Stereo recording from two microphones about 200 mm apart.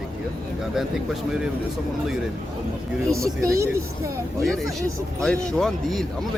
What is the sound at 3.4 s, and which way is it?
Speech, 15° right (ahead or behind).